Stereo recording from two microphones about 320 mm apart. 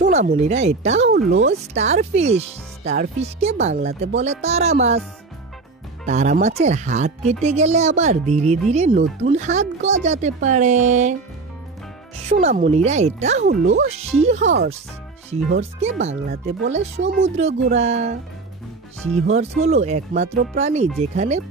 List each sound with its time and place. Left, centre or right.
0.0 s speech: right
6.0 s speech: right
12.3 s speech: right
17.4 s speech: right
19.3 s speech: right